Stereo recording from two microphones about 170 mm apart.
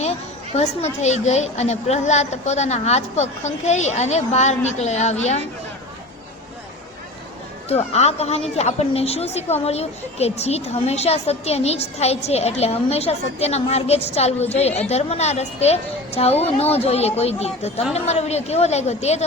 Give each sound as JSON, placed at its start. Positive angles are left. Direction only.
{"t": 0.5, "sound": "speech", "side_deg": 40}
{"t": 7.7, "sound": "speech", "side_deg": 40}